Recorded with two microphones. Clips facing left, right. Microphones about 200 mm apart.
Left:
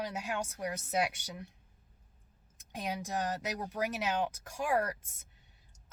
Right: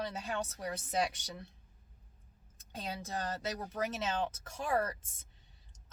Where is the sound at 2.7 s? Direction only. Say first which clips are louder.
Left 4 dB; 10° left (ahead or behind).